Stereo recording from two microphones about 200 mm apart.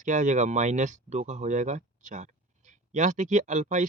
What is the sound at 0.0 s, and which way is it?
Speech, 40° right (ahead or behind).